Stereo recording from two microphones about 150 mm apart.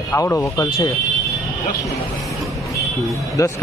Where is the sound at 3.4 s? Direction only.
20° left (ahead or behind).